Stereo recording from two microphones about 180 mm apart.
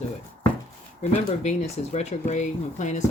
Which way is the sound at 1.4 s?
40° left (ahead or behind).